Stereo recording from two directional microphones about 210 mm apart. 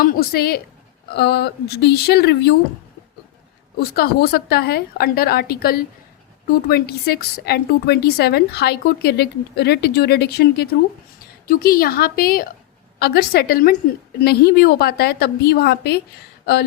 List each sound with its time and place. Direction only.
0.0 s speech: 45° left (ahead or behind)
3.8 s speech: 50° left (ahead or behind)